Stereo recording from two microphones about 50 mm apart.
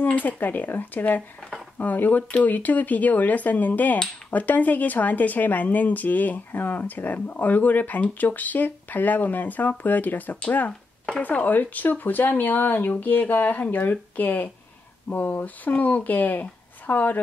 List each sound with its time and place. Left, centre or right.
0.0 s speech: left